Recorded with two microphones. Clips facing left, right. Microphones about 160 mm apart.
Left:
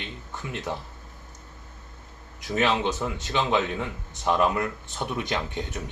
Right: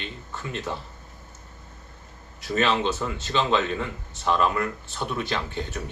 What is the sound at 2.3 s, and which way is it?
Speech, 15° left (ahead or behind).